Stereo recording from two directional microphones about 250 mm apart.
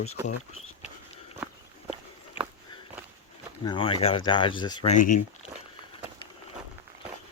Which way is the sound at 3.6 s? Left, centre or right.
Centre.